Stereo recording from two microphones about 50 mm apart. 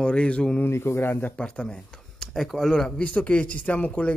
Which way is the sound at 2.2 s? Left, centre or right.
Centre.